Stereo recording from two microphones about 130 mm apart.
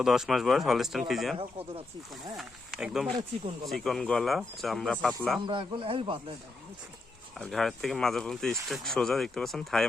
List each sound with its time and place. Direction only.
0.0 s speech: 5° right (ahead or behind)
1.4 s speech: 50° right (ahead or behind)
2.3 s speech: centre (ahead or behind)
5.5 s speech: 40° right (ahead or behind)
7.3 s speech: 5° left (ahead or behind)